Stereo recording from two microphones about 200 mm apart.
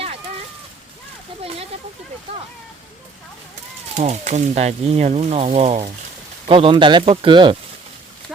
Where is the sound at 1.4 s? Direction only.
30° right (ahead or behind).